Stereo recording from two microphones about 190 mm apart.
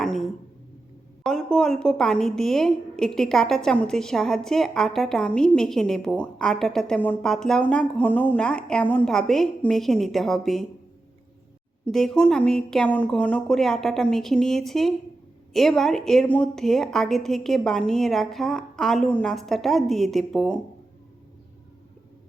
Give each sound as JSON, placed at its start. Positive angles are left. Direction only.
{"t": 0.0, "sound": "a sound", "side_deg": 0}
{"t": 1.2, "sound": "a woman's voice", "side_deg": 0}
{"t": 11.9, "sound": "a woman's voice", "side_deg": 0}